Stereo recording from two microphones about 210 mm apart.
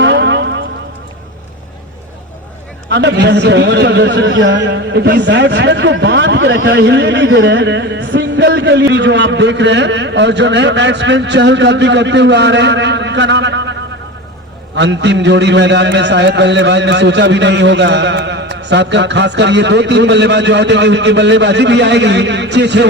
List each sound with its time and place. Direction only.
0.0 s a sound: 55° right (ahead or behind)
2.9 s a man's voice: 55° right (ahead or behind)
14.8 s a man's voice: 55° right (ahead or behind)